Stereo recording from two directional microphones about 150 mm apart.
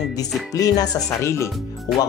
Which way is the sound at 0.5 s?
25° left (ahead or behind).